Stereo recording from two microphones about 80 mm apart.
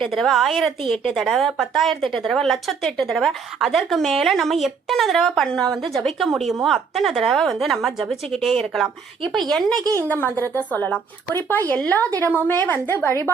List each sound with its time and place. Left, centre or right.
0.0 s speech: centre
9.7 s a woman's voice: right
10.0 s a woman's voice: left
10.3 s a woman's voice: right
10.6 s a woman's voice: centre